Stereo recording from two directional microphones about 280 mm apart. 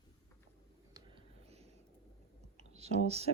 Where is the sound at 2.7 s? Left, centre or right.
Right.